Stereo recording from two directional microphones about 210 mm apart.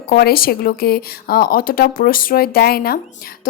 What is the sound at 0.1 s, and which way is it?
Speech, 45° left (ahead or behind).